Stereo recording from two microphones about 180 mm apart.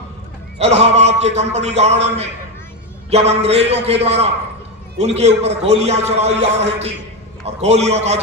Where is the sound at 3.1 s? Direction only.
35° right (ahead or behind).